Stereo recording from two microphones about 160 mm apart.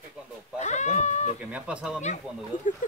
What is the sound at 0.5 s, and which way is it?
Speech, 45° left (ahead or behind).